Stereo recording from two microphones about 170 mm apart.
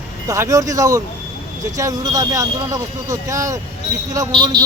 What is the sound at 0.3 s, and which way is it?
A man's voice, 20° right (ahead or behind).